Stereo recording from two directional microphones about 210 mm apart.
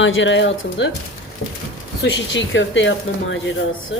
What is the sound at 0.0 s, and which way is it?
Speech, 65° left (ahead or behind).